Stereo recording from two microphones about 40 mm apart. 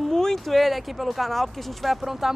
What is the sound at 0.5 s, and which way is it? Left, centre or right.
Speech, centre.